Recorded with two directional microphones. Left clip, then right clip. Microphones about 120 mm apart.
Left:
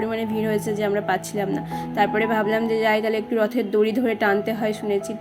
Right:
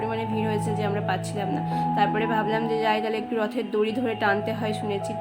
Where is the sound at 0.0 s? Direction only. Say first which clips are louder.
Left 2 dB; 30° left (ahead or behind).